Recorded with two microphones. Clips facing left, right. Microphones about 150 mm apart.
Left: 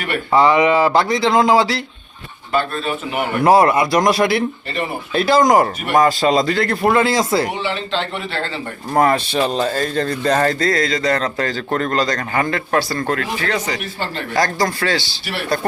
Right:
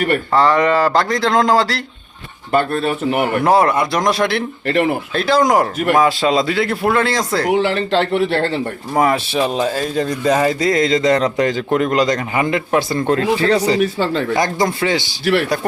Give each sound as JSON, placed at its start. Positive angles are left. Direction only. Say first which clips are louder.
{"t": 0.3, "sound": "speech", "louder": "left 2 dB", "side_deg": 10}
{"t": 2.5, "sound": "speech", "louder": "right 4 dB", "side_deg": -55}
{"t": 3.2, "sound": "a man's voice", "louder": "left 2 dB", "side_deg": 0}
{"t": 4.7, "sound": "speech", "louder": "right 8 dB", "side_deg": -90}
{"t": 5.1, "sound": "a man's voice", "louder": "left 2 dB", "side_deg": 5}
{"t": 7.4, "sound": "speech", "louder": "right 7 dB", "side_deg": -80}
{"t": 9.0, "sound": "speech", "louder": "even", "side_deg": -5}
{"t": 14.3, "sound": "speech", "louder": "right 1 dB", "side_deg": -20}